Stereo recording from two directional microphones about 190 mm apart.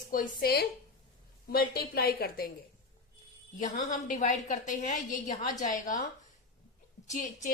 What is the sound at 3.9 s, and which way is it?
A woman's voice, 40° left (ahead or behind).